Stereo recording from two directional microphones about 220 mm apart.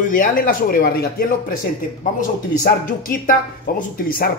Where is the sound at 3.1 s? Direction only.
40° left (ahead or behind).